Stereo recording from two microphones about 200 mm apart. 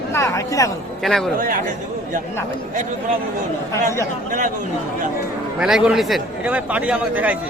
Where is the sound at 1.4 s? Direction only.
45° right (ahead or behind).